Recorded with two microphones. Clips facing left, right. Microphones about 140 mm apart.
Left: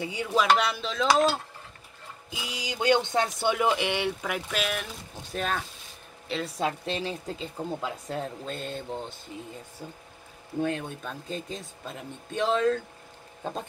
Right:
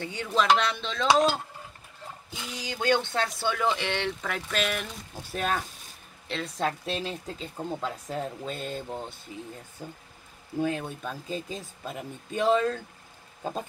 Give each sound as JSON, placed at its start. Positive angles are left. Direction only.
{"t": 0.0, "sound": "speech", "side_deg": 10}
{"t": 9.3, "sound": "speech", "side_deg": 55}
{"t": 10.6, "sound": "speech", "side_deg": -5}
{"t": 13.4, "sound": "a sound", "side_deg": -5}